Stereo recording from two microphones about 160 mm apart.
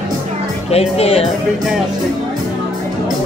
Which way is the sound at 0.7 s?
40° left (ahead or behind).